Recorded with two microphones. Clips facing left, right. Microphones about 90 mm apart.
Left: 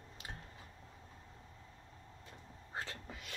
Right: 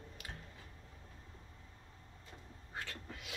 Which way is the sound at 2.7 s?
30° left (ahead or behind).